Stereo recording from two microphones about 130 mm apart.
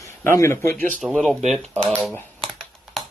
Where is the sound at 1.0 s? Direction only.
5° left (ahead or behind).